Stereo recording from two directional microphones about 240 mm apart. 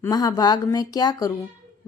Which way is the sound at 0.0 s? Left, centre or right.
Centre.